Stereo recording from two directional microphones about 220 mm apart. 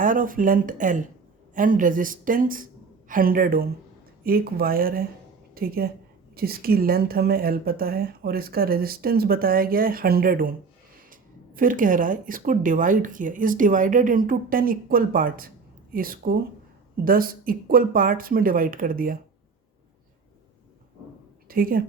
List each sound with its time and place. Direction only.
0.0 s a woman's voice: 35° right (ahead or behind)
21.4 s a woman's voice: 40° right (ahead or behind)